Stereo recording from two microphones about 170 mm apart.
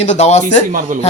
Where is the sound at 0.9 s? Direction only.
50° right (ahead or behind).